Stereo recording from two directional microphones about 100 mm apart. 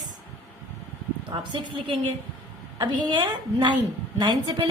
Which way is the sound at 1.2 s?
55° right (ahead or behind).